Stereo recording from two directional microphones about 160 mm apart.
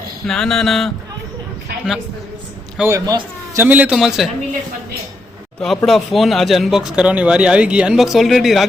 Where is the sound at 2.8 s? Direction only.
20° right (ahead or behind).